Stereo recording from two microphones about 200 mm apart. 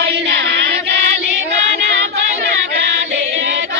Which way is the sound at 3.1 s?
65° right (ahead or behind).